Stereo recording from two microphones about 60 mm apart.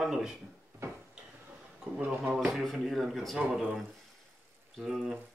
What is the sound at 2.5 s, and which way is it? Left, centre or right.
Speech, centre.